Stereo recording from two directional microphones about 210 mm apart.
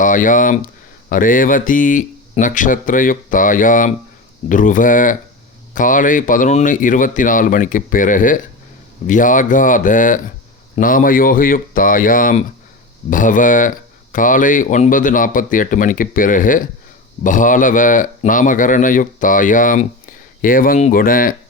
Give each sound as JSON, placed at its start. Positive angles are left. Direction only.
{"t": 0.0, "sound": "speech", "side_deg": 40}